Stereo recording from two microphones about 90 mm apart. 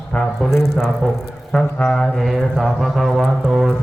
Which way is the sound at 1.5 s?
10° left (ahead or behind).